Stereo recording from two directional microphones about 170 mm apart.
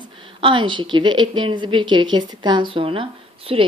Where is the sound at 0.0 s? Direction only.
30° right (ahead or behind).